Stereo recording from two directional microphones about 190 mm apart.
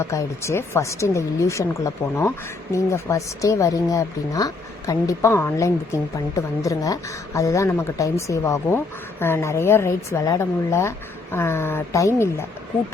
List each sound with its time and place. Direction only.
0.0 s speech: 15° left (ahead or behind)